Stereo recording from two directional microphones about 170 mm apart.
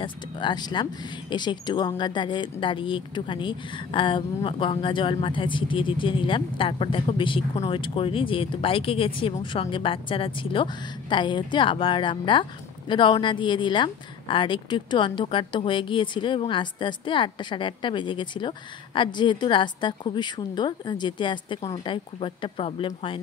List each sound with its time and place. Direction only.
0.0 s speech: 25° left (ahead or behind)